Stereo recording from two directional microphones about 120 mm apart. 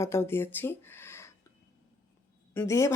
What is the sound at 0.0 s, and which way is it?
Speech, 20° left (ahead or behind).